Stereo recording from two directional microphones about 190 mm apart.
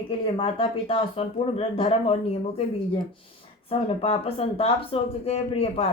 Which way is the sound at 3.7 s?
30° left (ahead or behind).